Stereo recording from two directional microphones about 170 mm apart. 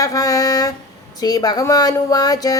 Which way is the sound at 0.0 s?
20° left (ahead or behind).